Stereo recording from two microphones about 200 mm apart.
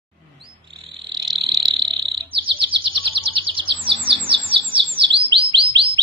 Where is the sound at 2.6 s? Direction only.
25° right (ahead or behind).